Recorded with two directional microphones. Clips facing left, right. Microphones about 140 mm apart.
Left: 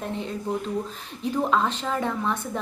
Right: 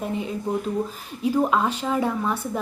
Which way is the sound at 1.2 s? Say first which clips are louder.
Right 3 dB; 10° right (ahead or behind).